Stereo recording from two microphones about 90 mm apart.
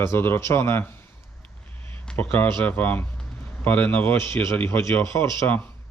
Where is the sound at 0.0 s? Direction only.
30° left (ahead or behind).